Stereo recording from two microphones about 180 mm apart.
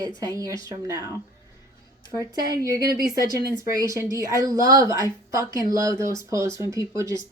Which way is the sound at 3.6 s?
20° right (ahead or behind).